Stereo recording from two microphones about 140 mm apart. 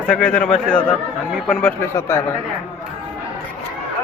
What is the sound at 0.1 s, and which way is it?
A man's voice, 10° left (ahead or behind).